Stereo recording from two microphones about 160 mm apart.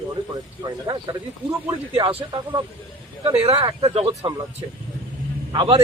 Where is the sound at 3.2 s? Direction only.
40° right (ahead or behind).